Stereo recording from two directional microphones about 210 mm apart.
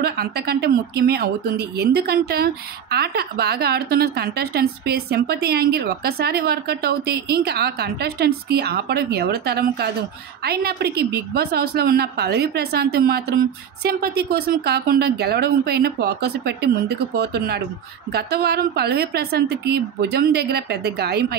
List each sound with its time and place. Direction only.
0.0 s speech: 50° right (ahead or behind)